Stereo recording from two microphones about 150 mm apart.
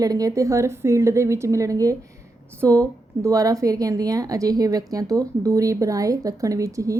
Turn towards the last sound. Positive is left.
turn(degrees=-20)  # may be behind; listen again after turning